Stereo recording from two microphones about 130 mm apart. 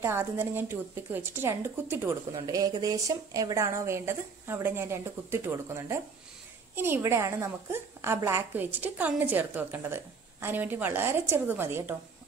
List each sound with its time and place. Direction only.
0.0 s a woman's voice: 15° right (ahead or behind)